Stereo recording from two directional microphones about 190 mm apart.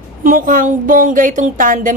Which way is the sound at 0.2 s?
45° right (ahead or behind).